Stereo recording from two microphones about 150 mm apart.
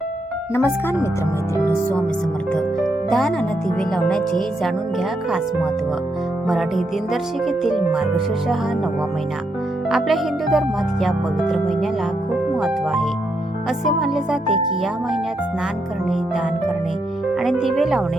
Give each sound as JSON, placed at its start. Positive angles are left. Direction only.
{"t": 0.5, "sound": "speech", "side_deg": 15}
{"t": 1.5, "sound": "music", "side_deg": 20}
{"t": 2.5, "sound": "speech", "side_deg": 5}
{"t": 6.5, "sound": "speech", "side_deg": 0}
{"t": 9.9, "sound": "speech", "side_deg": 0}
{"t": 12.5, "sound": "music", "side_deg": 0}
{"t": 13.7, "sound": "speech", "side_deg": 0}
{"t": 17.4, "sound": "speech", "side_deg": 0}